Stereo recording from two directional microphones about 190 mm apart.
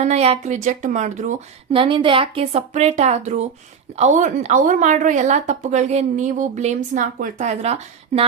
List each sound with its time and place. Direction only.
0.0 s a woman's voice: 35° right (ahead or behind)
1.7 s a woman's voice: 25° right (ahead or behind)